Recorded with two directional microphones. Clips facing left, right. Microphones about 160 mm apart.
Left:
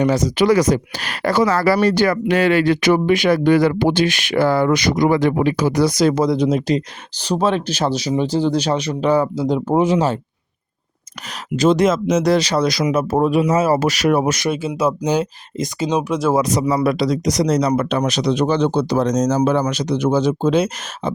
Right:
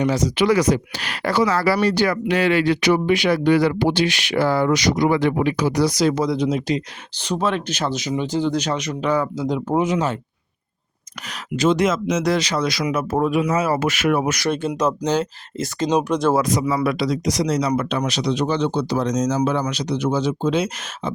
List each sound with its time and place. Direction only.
0.0 s speech: 50° left (ahead or behind); by 10.2 s 30° left (ahead or behind)
11.5 s speech: 40° left (ahead or behind)
14.5 s speech: 5° left (ahead or behind)
15.9 s speech: centre (ahead or behind)
16.6 s speech: 40° left (ahead or behind)